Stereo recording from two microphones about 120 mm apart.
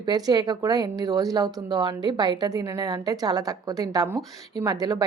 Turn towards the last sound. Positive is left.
turn(degrees=-30)  # may be behind; listen again after turning